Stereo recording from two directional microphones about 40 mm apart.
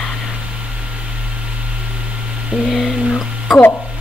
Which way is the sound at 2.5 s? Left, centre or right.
Right.